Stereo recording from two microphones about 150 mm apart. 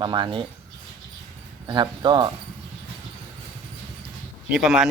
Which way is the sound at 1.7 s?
30° right (ahead or behind).